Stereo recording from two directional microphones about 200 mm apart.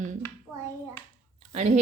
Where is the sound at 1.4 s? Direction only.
35° right (ahead or behind).